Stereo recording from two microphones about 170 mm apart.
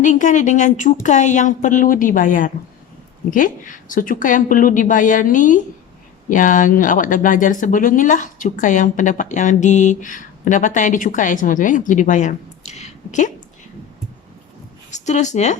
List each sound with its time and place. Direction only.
0.0 s speech: 45° left (ahead or behind)
14.8 s speech: 45° left (ahead or behind)